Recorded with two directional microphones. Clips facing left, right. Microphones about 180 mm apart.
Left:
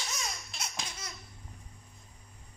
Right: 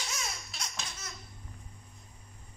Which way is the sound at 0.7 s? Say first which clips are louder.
Left 1 dB; 10° left (ahead or behind).